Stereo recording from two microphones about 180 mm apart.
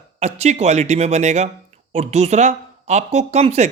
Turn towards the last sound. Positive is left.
turn(degrees=-35)  # may be behind; listen again after turning